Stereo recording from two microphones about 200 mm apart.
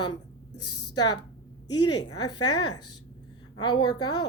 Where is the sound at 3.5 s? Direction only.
20° left (ahead or behind).